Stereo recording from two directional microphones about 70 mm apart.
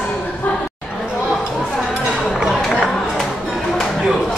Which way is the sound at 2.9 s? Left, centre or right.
Centre.